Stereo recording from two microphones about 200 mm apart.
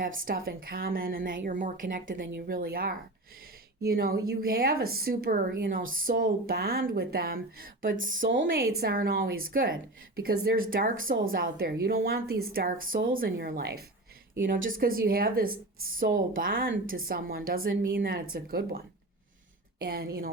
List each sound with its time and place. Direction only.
0.2 s a woman's voice: 45° right (ahead or behind)
19.8 s a woman's voice: 50° right (ahead or behind)